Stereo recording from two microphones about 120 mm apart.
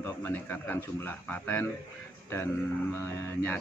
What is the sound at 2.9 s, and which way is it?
Speech, 25° left (ahead or behind).